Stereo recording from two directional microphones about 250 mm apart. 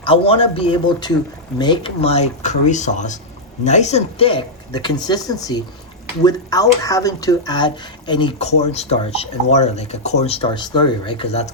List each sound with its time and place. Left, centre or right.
0.0 s speech: left